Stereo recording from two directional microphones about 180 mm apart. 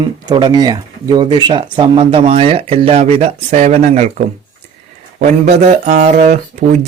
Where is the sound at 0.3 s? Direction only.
25° right (ahead or behind); by 4.1 s 40° right (ahead or behind).